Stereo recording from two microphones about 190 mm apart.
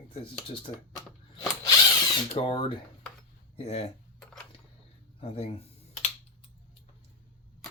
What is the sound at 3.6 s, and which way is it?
Speech, 35° left (ahead or behind).